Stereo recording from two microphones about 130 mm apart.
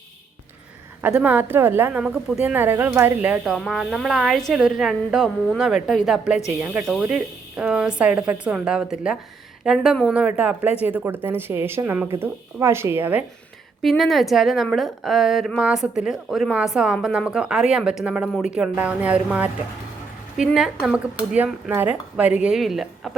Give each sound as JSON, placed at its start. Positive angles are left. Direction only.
{"t": 1.0, "sound": "a woman's voice", "side_deg": -15}
{"t": 13.8, "sound": "a woman's voice", "side_deg": 0}